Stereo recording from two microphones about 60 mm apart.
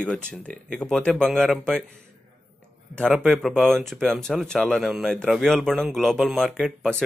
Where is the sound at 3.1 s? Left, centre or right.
Centre.